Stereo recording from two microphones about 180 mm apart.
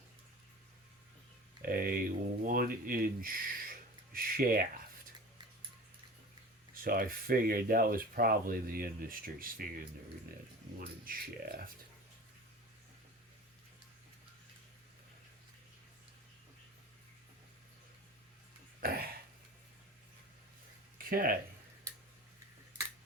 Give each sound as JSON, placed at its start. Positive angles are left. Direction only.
{"t": 1.6, "sound": "speech", "side_deg": -55}
{"t": 6.8, "sound": "speech", "side_deg": -50}
{"t": 18.8, "sound": "throat clearing", "side_deg": -55}
{"t": 21.0, "sound": "speech", "side_deg": -55}